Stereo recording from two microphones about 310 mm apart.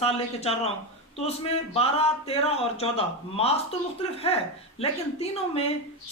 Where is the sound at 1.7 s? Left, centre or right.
Centre.